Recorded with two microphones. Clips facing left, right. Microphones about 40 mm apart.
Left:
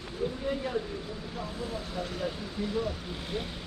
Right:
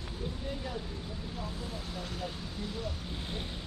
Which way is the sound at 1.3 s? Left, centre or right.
Centre.